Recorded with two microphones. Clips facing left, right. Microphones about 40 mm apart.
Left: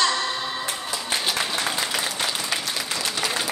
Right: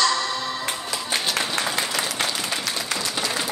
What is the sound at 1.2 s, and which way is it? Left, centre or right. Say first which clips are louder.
Applause: even; centre.